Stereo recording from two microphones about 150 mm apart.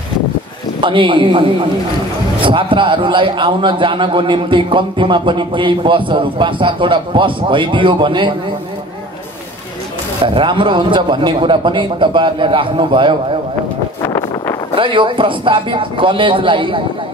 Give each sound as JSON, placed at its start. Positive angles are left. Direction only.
{"t": 0.7, "sound": "a man's voice", "side_deg": -35}
{"t": 2.4, "sound": "a man's voice", "side_deg": -35}
{"t": 10.2, "sound": "a man's voice", "side_deg": -35}
{"t": 14.0, "sound": "vehicle", "side_deg": 20}
{"t": 14.8, "sound": "a man's voice", "side_deg": -35}